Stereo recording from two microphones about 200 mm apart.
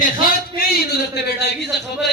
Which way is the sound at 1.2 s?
55° left (ahead or behind).